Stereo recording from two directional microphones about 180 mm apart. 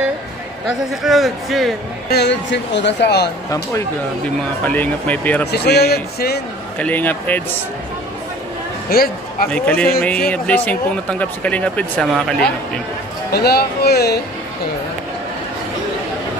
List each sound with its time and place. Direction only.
0.7 s a man's voice: centre (ahead or behind)
2.0 s speech: 70° left (ahead or behind)
4.6 s speech: 10° left (ahead or behind)
5.5 s a man's voice: 65° left (ahead or behind)
6.8 s speech: 10° left (ahead or behind)
8.9 s a man's voice: 55° left (ahead or behind)
9.5 s a man's voice: 10° left (ahead or behind)
13.3 s a man's voice: 65° left (ahead or behind)